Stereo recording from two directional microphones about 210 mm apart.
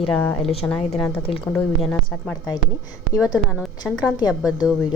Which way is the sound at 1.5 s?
5° left (ahead or behind).